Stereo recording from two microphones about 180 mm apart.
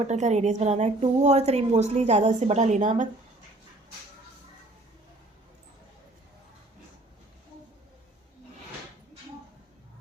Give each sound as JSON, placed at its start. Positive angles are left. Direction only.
{"t": 0.1, "sound": "a woman's voice", "side_deg": -40}